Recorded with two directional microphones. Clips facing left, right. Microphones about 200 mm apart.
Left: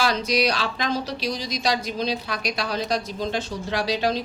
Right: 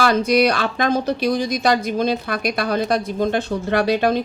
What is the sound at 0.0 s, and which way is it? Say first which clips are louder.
Speech: right 6 dB; 55° right (ahead or behind).